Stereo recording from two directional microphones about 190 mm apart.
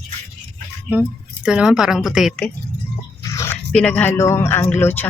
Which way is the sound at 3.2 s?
15° left (ahead or behind).